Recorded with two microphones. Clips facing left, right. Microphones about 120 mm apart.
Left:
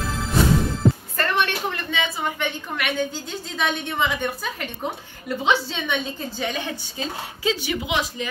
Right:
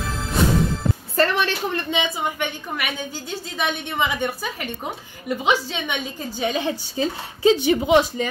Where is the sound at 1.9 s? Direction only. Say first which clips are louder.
Right 2 dB; 15° right (ahead or behind).